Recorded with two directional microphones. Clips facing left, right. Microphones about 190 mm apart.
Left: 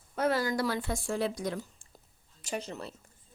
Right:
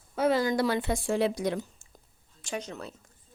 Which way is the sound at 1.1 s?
75° right (ahead or behind).